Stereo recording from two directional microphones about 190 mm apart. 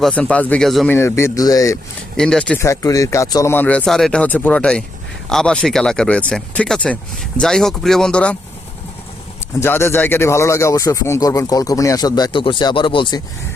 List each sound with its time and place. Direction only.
0.0 s speech: 5° left (ahead or behind)
0.9 s speech: 15° left (ahead or behind)
2.1 s speech: 5° left (ahead or behind)
9.6 s speech: 10° left (ahead or behind)